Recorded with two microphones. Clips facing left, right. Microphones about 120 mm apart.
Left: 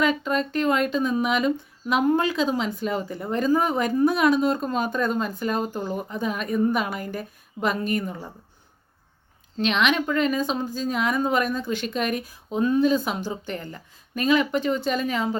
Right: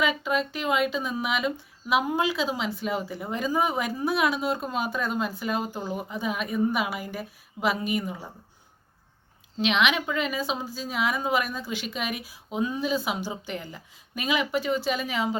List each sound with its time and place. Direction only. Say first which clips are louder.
0.0 s speech: left 3 dB; 5° right (ahead or behind)
9.6 s a woman's voice: left 2 dB; 5° right (ahead or behind)